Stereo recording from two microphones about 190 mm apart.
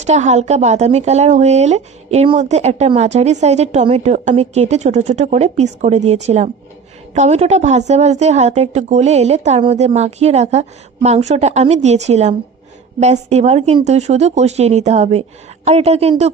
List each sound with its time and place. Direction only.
0.0 s speech: 35° right (ahead or behind)